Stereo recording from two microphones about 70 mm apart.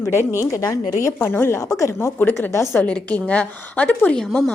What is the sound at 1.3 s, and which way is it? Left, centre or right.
A woman's voice, left.